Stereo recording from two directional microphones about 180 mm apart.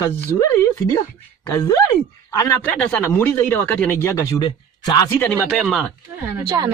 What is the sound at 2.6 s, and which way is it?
Speech, 10° left (ahead or behind).